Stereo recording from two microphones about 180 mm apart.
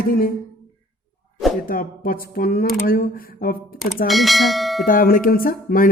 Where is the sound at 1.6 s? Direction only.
55° left (ahead or behind).